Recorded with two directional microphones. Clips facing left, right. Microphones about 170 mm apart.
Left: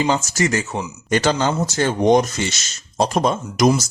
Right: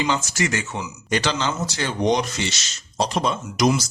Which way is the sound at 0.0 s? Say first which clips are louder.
Left 4 dB; 40° left (ahead or behind).